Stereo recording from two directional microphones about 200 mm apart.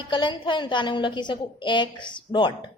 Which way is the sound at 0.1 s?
25° left (ahead or behind).